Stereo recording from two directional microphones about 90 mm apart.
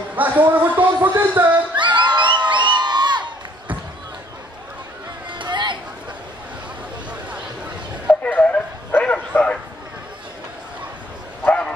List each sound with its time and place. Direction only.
0.1 s speech: 20° right (ahead or behind)
1.8 s crowd: 60° right (ahead or behind)
5.3 s a sound: 60° right (ahead or behind)
8.1 s bow-wow: 15° left (ahead or behind)
11.4 s bow-wow: 15° left (ahead or behind)